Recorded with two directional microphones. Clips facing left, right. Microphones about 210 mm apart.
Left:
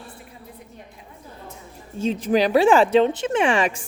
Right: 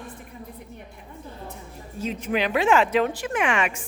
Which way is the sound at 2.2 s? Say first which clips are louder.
Left 6 dB; 35° left (ahead or behind).